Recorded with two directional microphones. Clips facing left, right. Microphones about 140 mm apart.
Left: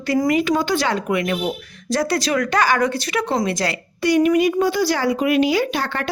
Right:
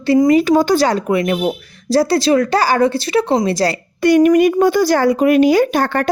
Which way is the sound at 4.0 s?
50° right (ahead or behind).